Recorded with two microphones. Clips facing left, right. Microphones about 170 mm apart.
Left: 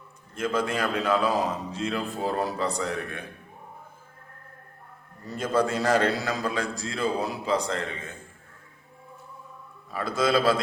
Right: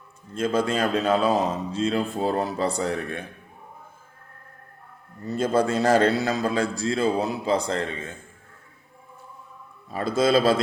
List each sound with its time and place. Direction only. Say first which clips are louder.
0.3 s a man's voice: right 4 dB; 30° right (ahead or behind)
5.3 s a man's voice: right 3 dB; 30° right (ahead or behind)
9.9 s a man's voice: right 4 dB; 25° right (ahead or behind)